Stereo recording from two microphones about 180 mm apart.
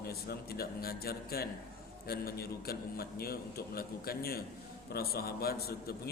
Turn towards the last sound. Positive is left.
turn(degrees=60)  # may be behind; listen again after turning